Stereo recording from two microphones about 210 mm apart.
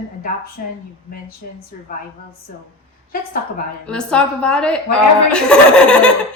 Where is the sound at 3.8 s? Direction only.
5° left (ahead or behind).